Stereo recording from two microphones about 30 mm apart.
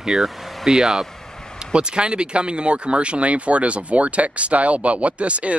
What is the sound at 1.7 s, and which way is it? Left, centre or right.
Speech, right.